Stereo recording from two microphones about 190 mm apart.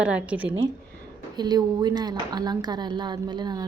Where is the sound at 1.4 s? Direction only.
20° right (ahead or behind).